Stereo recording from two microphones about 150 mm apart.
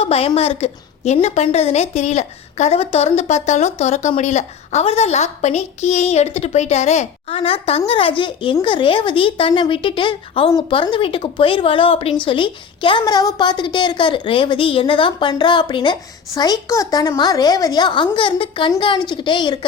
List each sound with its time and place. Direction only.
0.0 s a woman's voice: 40° left (ahead or behind)